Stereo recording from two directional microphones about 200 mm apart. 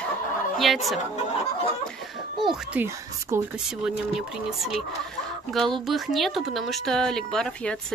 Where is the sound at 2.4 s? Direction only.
5° right (ahead or behind).